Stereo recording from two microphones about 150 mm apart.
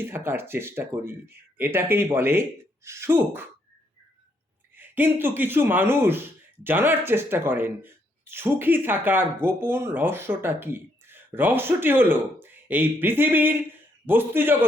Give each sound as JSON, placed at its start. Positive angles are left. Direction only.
{"t": 0.0, "sound": "speech", "side_deg": -15}
{"t": 4.7, "sound": "speech", "side_deg": -15}